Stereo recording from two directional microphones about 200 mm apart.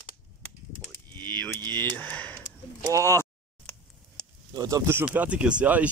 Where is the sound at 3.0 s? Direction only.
10° left (ahead or behind).